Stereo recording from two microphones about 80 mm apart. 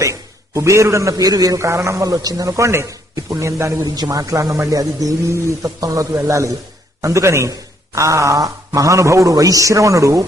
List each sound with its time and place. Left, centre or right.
0.0 s a man's voice: right
3.8 s a man's voice: right